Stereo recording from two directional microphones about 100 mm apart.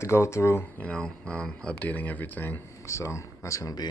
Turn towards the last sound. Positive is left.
turn(degrees=40)  # may be behind; listen again after turning